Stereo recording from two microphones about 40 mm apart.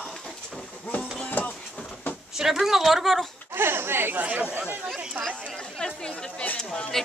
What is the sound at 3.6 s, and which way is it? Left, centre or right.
Speech, right.